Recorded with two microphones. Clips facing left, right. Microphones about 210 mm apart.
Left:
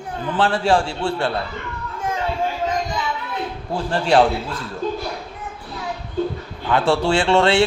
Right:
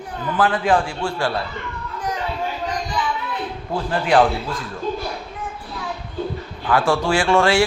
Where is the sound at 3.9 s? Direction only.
30° left (ahead or behind).